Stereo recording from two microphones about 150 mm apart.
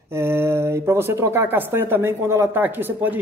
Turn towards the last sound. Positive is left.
turn(degrees=-10)  # may be behind; listen again after turning